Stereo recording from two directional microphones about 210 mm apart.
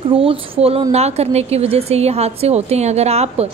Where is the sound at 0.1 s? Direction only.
25° right (ahead or behind).